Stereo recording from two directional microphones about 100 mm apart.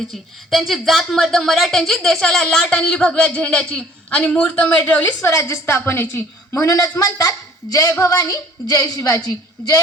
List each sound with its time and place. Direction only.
0.1 s speech: centre (ahead or behind); by 5.1 s 15° left (ahead or behind)
5.2 s a woman's voice: 30° left (ahead or behind)
6.7 s a woman's voice: 30° left (ahead or behind)